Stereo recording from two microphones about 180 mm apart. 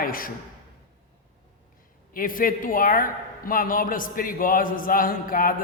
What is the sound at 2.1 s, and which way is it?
A man's voice, 50° left (ahead or behind).